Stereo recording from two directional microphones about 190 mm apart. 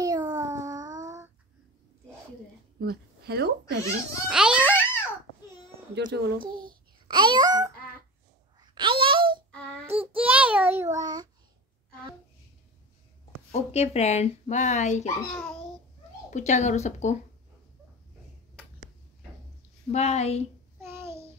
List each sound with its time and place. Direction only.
0.0 s child singing: 20° right (ahead or behind)
2.8 s speech: 55° right (ahead or behind)
4.3 s speech: 5° right (ahead or behind)
5.9 s a child's voice: 65° right (ahead or behind)
6.4 s a child's voice: 25° right (ahead or behind)
8.5 s a sound: 25° right (ahead or behind)
9.9 s child singing: 10° right (ahead or behind)
13.5 s speech: 35° left (ahead or behind)
16.3 s speech: 40° left (ahead or behind)
19.9 s speech: 35° left (ahead or behind)
20.8 s a sound: 15° right (ahead or behind)